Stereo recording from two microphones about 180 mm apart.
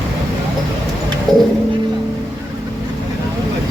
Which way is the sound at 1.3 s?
20° right (ahead or behind).